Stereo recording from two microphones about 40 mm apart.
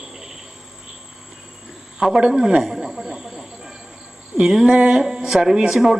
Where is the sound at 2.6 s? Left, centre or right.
Centre.